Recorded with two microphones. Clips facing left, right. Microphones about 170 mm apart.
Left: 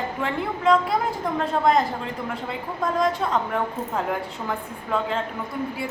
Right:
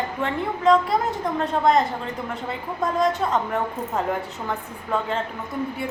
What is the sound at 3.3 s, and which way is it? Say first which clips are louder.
Speech: right 1 dB; 5° right (ahead or behind).